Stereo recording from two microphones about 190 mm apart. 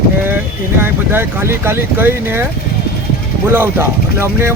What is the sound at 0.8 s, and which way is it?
Speech, 10° right (ahead or behind).